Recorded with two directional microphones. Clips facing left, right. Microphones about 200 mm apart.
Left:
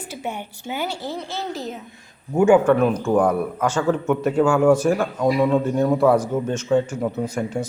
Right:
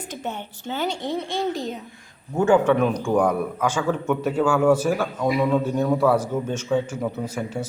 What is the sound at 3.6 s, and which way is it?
A man's voice, 10° right (ahead or behind).